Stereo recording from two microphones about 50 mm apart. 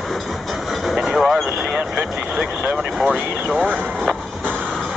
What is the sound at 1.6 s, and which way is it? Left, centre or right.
Vehicle, right.